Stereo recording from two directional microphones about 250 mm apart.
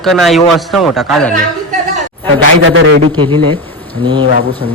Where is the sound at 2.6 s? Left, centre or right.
Right.